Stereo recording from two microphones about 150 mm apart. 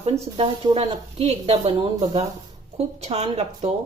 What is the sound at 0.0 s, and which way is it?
A woman's voice, 40° right (ahead or behind).